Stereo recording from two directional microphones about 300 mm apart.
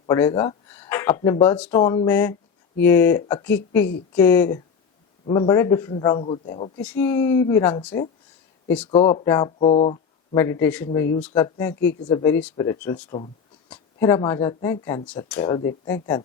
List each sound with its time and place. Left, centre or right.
0.0 s speech: centre
6.8 s speech: centre
8.9 s speech: centre
13.1 s speech: centre